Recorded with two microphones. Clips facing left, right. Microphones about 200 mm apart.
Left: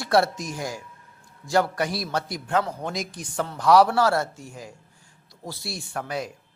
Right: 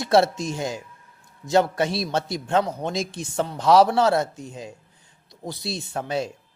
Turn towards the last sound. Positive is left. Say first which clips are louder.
# right 4 dB
turn(degrees=-25)  # may be behind; listen again after turning